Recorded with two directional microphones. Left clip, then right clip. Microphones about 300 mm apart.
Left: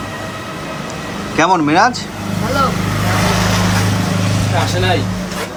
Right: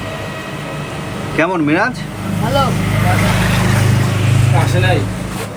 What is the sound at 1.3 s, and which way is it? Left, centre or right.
Speech, centre.